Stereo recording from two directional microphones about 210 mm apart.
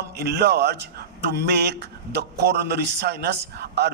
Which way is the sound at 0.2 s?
50° right (ahead or behind).